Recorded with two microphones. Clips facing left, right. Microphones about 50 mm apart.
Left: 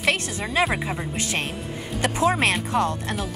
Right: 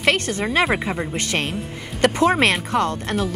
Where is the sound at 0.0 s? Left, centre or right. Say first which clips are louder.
Right 4 dB; right.